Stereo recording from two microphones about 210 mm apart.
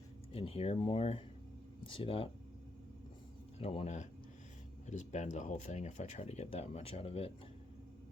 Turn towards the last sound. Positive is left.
turn(degrees=25)  # may be behind; listen again after turning